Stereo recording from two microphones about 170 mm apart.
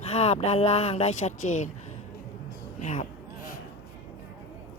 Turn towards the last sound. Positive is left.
turn(degrees=40)  # may be behind; listen again after turning